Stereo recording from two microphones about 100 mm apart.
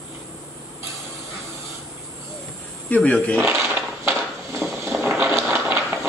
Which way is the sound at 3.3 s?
25° right (ahead or behind).